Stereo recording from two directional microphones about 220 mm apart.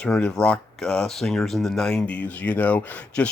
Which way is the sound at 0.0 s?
5° left (ahead or behind).